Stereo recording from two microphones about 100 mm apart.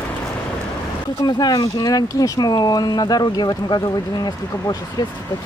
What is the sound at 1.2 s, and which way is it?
Speech, 45° left (ahead or behind).